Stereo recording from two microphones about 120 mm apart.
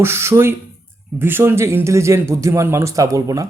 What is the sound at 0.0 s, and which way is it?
Speech, 20° right (ahead or behind).